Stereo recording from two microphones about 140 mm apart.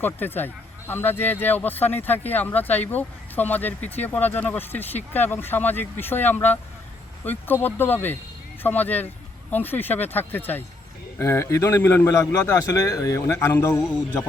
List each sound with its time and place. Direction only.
0.0 s a man's voice: 15° left (ahead or behind)